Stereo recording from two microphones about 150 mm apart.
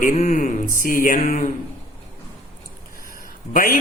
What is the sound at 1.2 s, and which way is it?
Speech, 50° left (ahead or behind).